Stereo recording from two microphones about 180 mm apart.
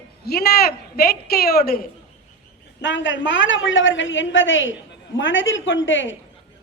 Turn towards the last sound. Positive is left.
turn(degrees=90)